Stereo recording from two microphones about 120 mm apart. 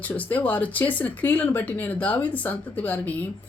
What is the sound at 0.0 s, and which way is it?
A woman's voice, 15° left (ahead or behind).